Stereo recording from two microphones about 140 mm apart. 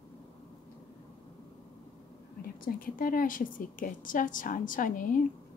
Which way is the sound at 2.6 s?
90° left.